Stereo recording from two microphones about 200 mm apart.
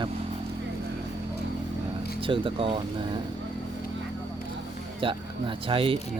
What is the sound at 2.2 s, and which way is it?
Speech, 25° right (ahead or behind).